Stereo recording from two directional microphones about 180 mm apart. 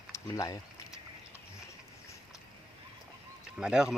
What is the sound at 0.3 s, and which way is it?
Speech, 20° left (ahead or behind).